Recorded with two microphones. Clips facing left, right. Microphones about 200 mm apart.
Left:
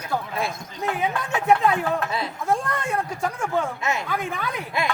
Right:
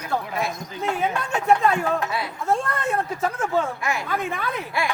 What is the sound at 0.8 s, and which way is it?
A man's voice, centre (ahead or behind).